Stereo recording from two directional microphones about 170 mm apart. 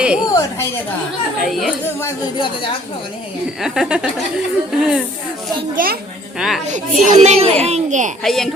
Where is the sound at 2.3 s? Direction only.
30° left (ahead or behind).